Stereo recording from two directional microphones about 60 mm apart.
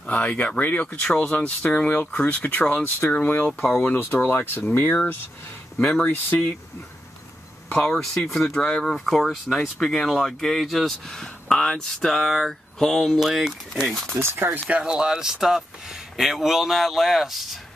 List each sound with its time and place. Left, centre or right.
0.1 s speech: left
5.9 s speech: left
7.7 s speech: centre
13.2 s speech: centre
14.1 s speech: right
14.8 s speech: centre